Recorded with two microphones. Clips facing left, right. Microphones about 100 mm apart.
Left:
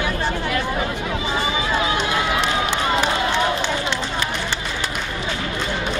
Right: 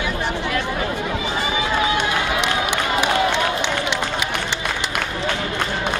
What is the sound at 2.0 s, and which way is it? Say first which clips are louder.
Run: even; 60° right (ahead or behind).